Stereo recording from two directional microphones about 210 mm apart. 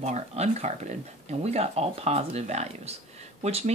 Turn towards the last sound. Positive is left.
turn(degrees=-30)  # may be behind; listen again after turning